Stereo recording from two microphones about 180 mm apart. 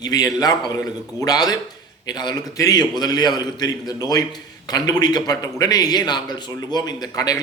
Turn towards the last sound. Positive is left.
turn(degrees=20)  # may be behind; listen again after turning